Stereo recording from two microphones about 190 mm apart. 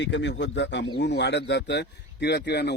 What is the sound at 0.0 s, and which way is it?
Speech, 70° left (ahead or behind).